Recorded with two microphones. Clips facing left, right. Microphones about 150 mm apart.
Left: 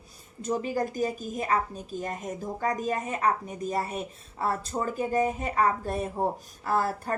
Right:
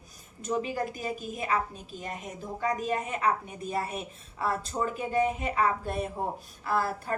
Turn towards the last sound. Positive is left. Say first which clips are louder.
# left 2 dB
turn(degrees=40)  # may be behind; listen again after turning